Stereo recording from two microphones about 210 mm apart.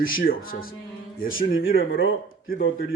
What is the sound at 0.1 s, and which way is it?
Speech, 45° left (ahead or behind).